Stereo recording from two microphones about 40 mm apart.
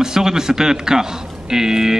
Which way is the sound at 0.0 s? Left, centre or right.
Centre.